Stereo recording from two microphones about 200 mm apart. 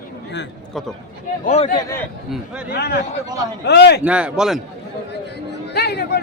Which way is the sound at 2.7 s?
55° left (ahead or behind).